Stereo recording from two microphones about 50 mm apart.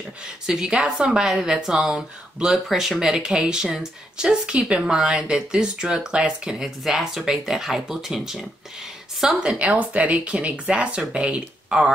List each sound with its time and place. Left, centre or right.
0.5 s speech: centre
6.6 s speech: centre
9.6 s speech: right